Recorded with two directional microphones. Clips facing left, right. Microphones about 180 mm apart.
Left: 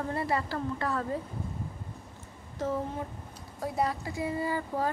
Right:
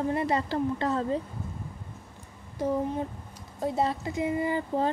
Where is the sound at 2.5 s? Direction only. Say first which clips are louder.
Right 4 dB; 15° right (ahead or behind).